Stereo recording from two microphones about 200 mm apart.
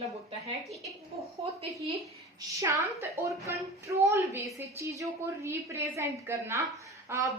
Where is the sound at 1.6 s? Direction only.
30° right (ahead or behind).